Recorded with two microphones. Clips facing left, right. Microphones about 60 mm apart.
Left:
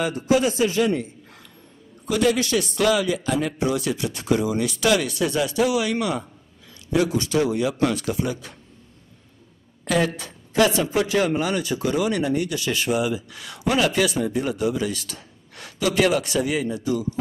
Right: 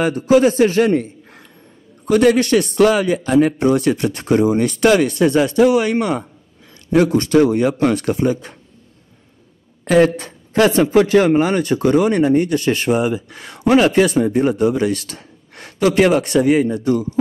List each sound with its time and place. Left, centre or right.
0.0 s a woman's voice: right
9.8 s a woman's voice: right